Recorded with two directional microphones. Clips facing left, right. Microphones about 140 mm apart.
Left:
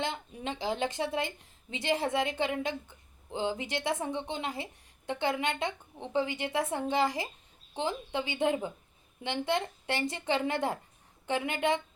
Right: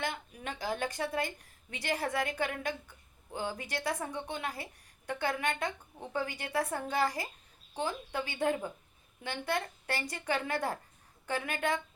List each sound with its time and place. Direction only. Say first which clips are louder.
0.0 s a woman's voice: left 3 dB; 25° left (ahead or behind)